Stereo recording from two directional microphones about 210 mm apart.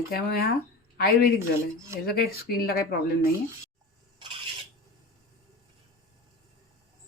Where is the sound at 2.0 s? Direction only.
45° left (ahead or behind).